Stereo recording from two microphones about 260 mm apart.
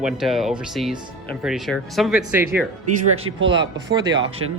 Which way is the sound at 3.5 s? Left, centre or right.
Centre.